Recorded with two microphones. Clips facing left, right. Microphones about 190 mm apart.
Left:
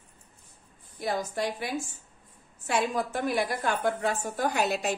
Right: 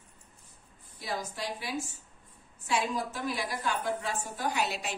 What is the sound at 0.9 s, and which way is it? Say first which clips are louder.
A woman's voice: left 6 dB; 55° left (ahead or behind).